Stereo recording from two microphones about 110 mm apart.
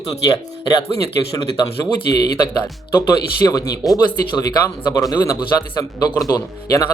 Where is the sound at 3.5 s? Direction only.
35° left (ahead or behind).